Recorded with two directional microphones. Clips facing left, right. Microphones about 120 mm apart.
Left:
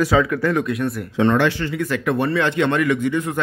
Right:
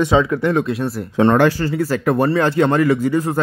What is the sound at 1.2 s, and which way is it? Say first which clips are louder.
Speech: right 4 dB; 45° right (ahead or behind).